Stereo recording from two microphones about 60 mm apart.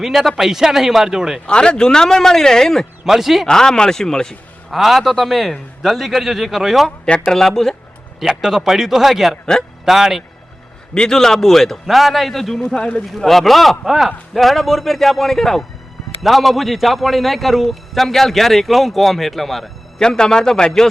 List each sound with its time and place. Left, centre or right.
0.0 s a man's voice: centre
1.5 s speech: centre
3.0 s speech: centre
3.4 s speech: centre
4.7 s a man's voice: centre
7.0 s speech: centre
8.2 s a man's voice: centre
10.9 s a man's voice: centre
12.6 s speech: centre
13.1 s a man's voice: centre